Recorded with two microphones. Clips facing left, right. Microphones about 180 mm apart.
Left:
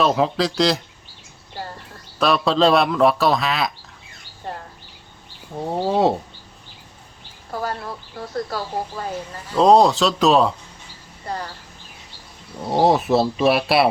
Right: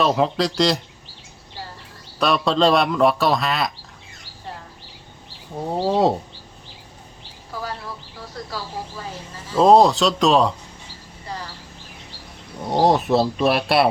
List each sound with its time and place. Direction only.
0.0 s speech: centre (ahead or behind)
1.6 s a sound: 55° left (ahead or behind)
2.1 s speech: centre (ahead or behind)
5.5 s speech: centre (ahead or behind)
7.5 s speech: 55° left (ahead or behind)
9.5 s speech: 5° right (ahead or behind)
12.6 s speech: centre (ahead or behind)